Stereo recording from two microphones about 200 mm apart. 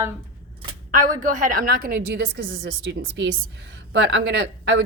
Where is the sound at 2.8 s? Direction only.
60° right (ahead or behind).